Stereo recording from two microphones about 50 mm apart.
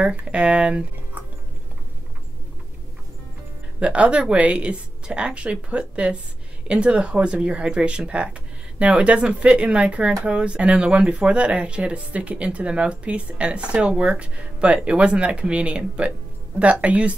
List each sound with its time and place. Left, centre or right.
0.0 s speech: right
3.8 s speech: right